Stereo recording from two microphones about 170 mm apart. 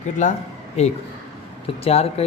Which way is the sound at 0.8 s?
40° left (ahead or behind).